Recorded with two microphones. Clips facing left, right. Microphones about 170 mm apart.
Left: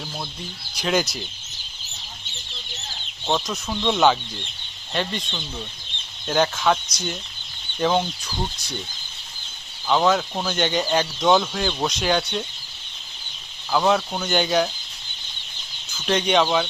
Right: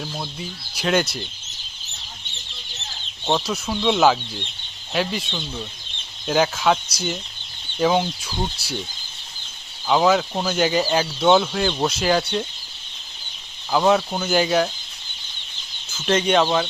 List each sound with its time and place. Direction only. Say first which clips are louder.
0.8 s speech: right 2 dB; centre (ahead or behind)
3.2 s speech: right 2 dB; 5° right (ahead or behind)
9.8 s speech: right 2 dB; 5° right (ahead or behind)
13.7 s speech: right 2 dB; 5° right (ahead or behind)
16.0 s speech: right 2 dB; centre (ahead or behind)